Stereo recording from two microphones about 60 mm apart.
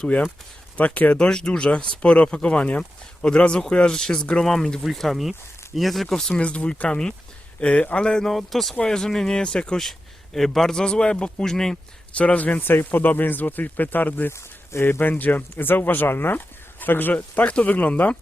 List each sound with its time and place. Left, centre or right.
0.0 s speech: left
1.2 s speech: centre
6.4 s speech: left
8.3 s speech: centre
12.1 s speech: left
14.3 s speech: left
14.8 s speech: left